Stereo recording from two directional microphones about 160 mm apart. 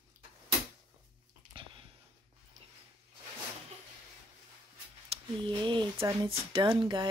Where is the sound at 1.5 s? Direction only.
35° right (ahead or behind).